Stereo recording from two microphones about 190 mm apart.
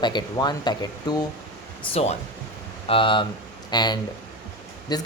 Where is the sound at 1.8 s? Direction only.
30° left (ahead or behind).